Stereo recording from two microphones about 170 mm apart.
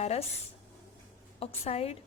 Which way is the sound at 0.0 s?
40° left (ahead or behind).